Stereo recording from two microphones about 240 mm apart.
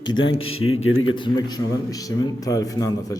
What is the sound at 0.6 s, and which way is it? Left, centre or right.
Speech, left.